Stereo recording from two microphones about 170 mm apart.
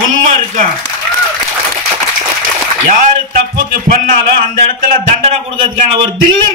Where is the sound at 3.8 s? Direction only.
55° right (ahead or behind).